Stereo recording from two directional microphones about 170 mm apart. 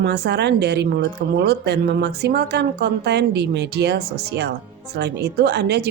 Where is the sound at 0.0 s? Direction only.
85° right.